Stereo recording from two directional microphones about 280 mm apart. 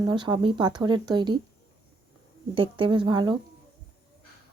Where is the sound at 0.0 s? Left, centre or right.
Centre.